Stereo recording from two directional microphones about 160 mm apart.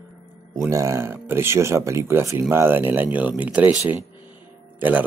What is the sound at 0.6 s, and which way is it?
Speech, 20° right (ahead or behind).